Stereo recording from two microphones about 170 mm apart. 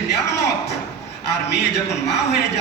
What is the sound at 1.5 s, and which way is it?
A man's voice, 80° left.